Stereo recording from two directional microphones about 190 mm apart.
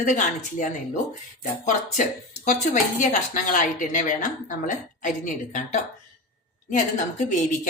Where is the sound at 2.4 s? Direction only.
40° left (ahead or behind).